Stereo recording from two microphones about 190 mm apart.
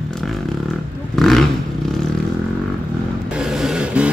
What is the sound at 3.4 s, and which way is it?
Vehicle, 5° right (ahead or behind).